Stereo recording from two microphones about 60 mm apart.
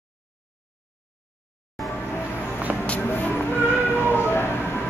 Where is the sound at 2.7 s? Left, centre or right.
Right.